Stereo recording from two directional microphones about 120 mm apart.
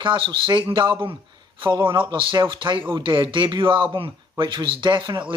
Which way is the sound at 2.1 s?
45° right (ahead or behind).